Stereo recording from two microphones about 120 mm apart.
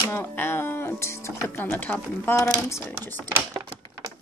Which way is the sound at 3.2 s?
25° right (ahead or behind).